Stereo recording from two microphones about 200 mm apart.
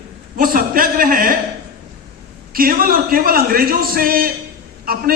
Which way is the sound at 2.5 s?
45° right (ahead or behind).